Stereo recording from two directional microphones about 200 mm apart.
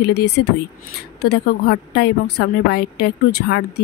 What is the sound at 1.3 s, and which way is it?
A woman's voice, 55° left (ahead or behind).